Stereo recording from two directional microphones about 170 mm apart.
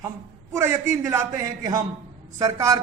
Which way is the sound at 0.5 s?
15° right (ahead or behind).